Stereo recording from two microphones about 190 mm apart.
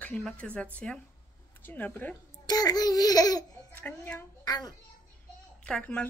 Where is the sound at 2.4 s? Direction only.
20° left (ahead or behind).